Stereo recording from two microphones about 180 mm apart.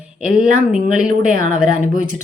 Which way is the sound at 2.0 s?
45° right (ahead or behind).